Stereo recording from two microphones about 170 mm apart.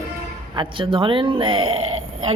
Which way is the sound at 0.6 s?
30° right (ahead or behind).